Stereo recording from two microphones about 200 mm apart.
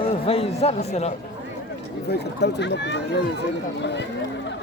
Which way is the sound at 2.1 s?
60° left (ahead or behind).